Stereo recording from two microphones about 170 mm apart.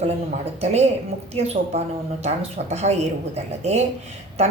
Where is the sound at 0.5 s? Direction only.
40° right (ahead or behind).